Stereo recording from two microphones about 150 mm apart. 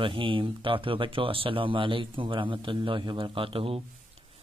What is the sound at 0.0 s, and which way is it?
Speech, 35° right (ahead or behind).